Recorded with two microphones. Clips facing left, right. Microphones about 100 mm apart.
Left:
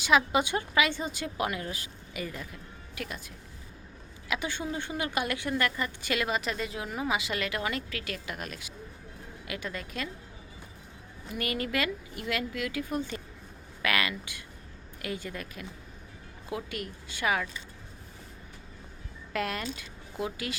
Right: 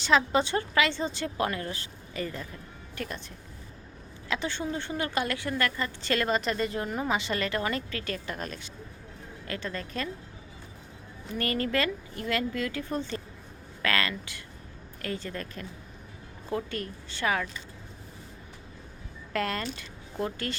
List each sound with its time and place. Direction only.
0.0 s a woman's voice: 10° left (ahead or behind)
11.3 s a woman's voice: 10° left (ahead or behind)
19.3 s speech: 10° left (ahead or behind)